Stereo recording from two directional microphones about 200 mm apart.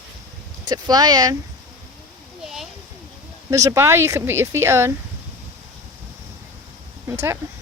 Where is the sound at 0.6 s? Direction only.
20° right (ahead or behind).